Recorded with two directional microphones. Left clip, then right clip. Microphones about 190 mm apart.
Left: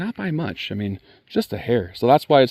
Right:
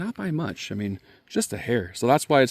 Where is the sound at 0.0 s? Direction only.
35° left (ahead or behind).